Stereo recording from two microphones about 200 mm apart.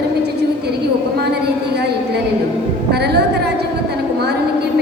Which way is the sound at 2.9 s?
55° right (ahead or behind).